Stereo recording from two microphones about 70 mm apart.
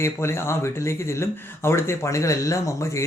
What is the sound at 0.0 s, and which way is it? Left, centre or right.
Speech, left.